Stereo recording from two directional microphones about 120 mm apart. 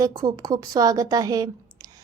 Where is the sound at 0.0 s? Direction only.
35° right (ahead or behind).